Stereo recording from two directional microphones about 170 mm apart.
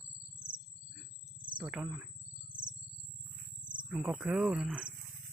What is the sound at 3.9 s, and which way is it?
Speech, 5° right (ahead or behind).